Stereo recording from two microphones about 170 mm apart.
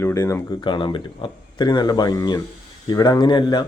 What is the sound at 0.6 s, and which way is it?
Speech, 30° left (ahead or behind).